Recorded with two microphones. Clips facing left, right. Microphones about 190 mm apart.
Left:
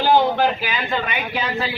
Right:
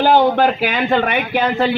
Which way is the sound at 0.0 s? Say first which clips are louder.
Right 4 dB; 60° right (ahead or behind).